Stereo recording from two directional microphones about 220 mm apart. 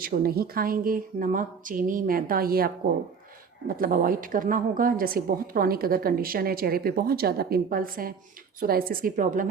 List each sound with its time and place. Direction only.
0.0 s a woman's voice: 45° right (ahead or behind)